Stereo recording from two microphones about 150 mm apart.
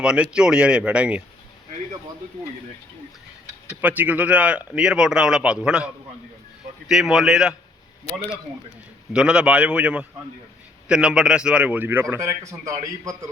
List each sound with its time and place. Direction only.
0.0 s speech: 5° right (ahead or behind)
3.4 s a man's voice: 10° right (ahead or behind)
9.1 s a man's voice: 5° right (ahead or behind); by 13.1 s 25° right (ahead or behind)